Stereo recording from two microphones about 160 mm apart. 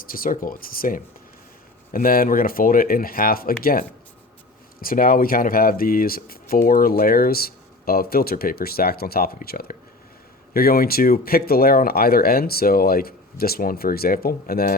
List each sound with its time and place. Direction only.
0.0 s speech: 60° left (ahead or behind)